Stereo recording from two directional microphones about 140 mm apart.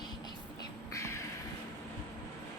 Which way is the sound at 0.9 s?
20° left (ahead or behind).